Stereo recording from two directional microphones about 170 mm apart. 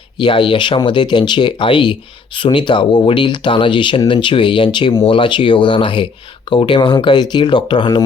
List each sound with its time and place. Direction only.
0.2 s speech: 30° left (ahead or behind)